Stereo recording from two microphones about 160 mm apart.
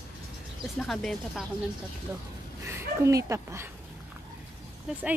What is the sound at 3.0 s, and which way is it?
Speech, 15° right (ahead or behind).